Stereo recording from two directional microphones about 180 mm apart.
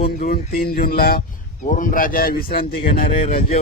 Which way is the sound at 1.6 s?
45° left (ahead or behind).